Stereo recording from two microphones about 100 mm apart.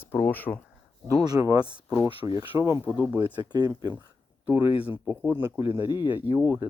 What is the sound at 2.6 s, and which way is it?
Speech, 35° right (ahead or behind).